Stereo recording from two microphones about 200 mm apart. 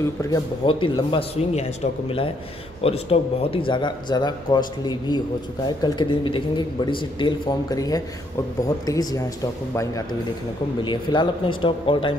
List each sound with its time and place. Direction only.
0.2 s a man's voice: 20° left (ahead or behind)